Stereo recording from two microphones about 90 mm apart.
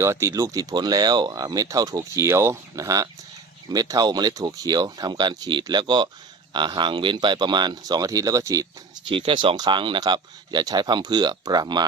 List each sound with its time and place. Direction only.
0.0 s speech: 30° right (ahead or behind)
0.4 s speech: 45° right (ahead or behind)
9.0 s speech: 70° right (ahead or behind)
10.0 s speech: 50° right (ahead or behind)